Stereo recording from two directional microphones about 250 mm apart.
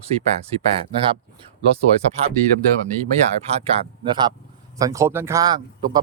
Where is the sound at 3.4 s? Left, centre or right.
Right.